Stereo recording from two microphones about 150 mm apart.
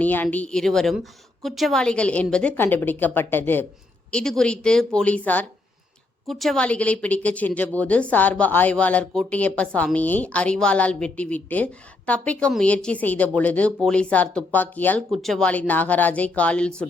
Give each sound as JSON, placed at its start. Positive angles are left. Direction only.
{"t": 0.0, "sound": "a woman's voice", "side_deg": 10}